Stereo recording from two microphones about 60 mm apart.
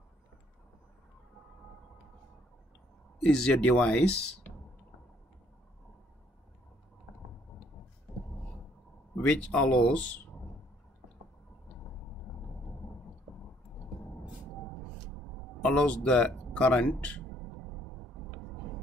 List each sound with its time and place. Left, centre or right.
3.2 s speech: centre
9.2 s speech: centre
15.6 s speech: left